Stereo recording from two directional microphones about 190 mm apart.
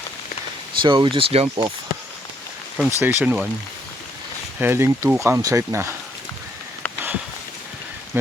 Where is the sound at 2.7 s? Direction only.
10° right (ahead or behind).